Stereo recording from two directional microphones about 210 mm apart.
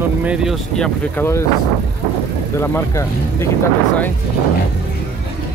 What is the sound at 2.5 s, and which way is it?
Speech, 10° left (ahead or behind).